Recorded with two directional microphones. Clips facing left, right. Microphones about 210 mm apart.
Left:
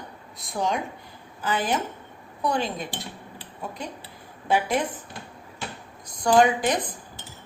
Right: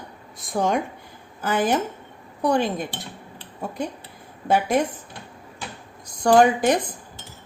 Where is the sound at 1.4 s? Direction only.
45° right (ahead or behind).